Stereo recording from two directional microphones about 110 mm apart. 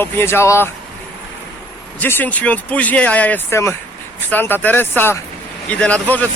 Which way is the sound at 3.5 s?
25° left (ahead or behind).